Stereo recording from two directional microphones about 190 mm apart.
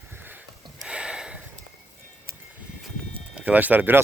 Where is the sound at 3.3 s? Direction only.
10° right (ahead or behind).